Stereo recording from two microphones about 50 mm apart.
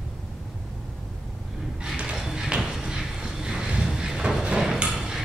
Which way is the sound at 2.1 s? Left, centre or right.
Centre.